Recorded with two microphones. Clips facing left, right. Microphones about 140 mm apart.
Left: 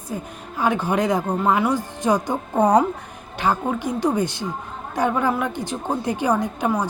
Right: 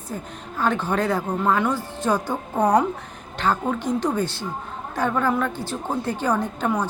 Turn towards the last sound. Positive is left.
turn(degrees=10)  # may be behind; listen again after turning